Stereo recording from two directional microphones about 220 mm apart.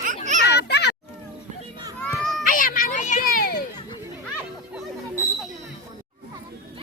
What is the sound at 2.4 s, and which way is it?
Music, 40° left (ahead or behind).